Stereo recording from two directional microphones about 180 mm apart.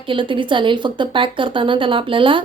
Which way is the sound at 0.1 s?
25° right (ahead or behind).